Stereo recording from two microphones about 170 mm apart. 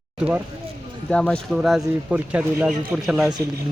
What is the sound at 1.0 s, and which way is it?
A man's voice, 5° left (ahead or behind).